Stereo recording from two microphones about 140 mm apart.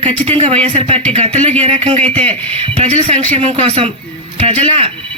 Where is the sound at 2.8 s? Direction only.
50° right (ahead or behind).